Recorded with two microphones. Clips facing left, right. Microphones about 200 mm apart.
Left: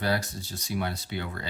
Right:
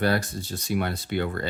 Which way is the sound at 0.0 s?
55° right (ahead or behind).